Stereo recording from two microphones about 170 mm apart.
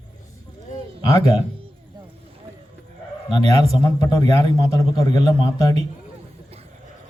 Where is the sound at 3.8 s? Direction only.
25° left (ahead or behind).